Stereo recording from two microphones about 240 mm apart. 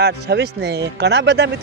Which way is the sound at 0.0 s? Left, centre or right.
Right.